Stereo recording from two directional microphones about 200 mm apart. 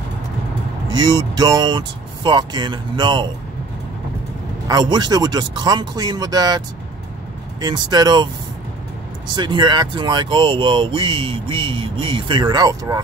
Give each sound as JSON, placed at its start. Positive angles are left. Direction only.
{"t": 0.9, "sound": "speech", "side_deg": -20}
{"t": 4.6, "sound": "speech", "side_deg": -20}
{"t": 7.6, "sound": "speech", "side_deg": -20}
{"t": 9.3, "sound": "speech", "side_deg": -25}